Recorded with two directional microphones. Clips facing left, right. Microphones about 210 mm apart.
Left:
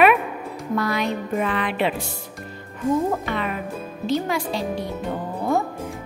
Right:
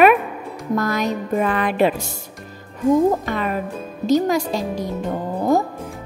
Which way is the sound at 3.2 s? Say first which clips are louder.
Right 3 dB; 40° right (ahead or behind).